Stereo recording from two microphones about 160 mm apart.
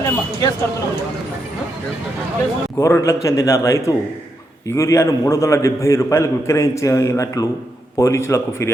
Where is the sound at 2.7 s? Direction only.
20° left (ahead or behind).